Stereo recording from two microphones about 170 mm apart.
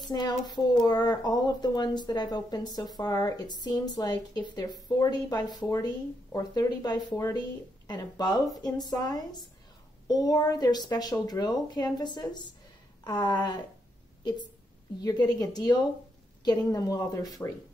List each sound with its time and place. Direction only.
0.1 s speech: 25° left (ahead or behind)
15.0 s speech: 25° left (ahead or behind)